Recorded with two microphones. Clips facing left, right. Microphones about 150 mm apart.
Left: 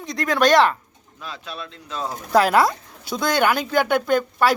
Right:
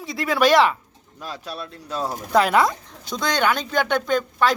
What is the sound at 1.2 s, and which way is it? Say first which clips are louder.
Speech: right 2 dB; 40° right (ahead or behind).